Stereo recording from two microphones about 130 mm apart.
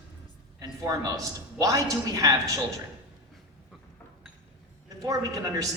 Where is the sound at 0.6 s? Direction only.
30° right (ahead or behind).